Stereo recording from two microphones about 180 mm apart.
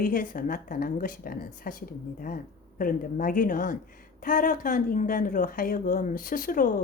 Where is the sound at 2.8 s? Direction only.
50° left (ahead or behind).